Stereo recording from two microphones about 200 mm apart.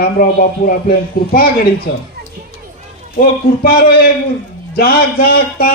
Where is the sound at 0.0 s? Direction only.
45° left (ahead or behind).